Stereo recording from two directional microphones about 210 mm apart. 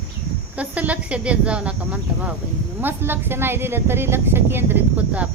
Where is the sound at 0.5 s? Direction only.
5° right (ahead or behind).